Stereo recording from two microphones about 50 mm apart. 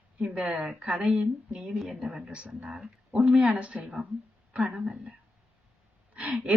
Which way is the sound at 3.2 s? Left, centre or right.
Right.